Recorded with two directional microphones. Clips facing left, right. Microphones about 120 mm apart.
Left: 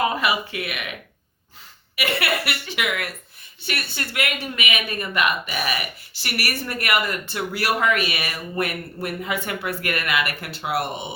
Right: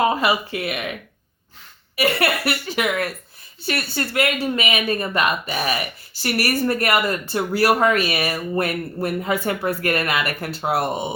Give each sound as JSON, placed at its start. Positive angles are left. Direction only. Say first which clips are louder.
{"t": 0.0, "sound": "speech", "louder": "right 3 dB", "side_deg": -30}
{"t": 2.0, "sound": "speech", "louder": "right 4 dB", "side_deg": -40}